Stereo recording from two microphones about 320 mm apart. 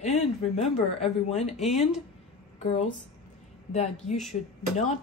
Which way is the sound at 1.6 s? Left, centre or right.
Centre.